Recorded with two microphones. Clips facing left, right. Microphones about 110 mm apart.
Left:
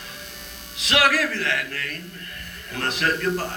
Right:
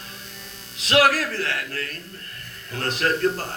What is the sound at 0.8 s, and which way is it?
Speech, 40° right (ahead or behind).